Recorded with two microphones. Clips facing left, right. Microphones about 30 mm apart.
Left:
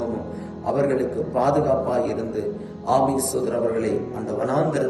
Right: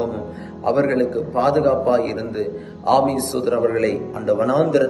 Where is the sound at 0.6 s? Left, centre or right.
Right.